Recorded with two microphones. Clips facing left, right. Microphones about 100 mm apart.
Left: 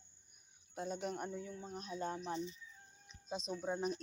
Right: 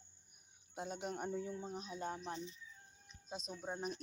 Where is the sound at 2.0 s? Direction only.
5° right (ahead or behind).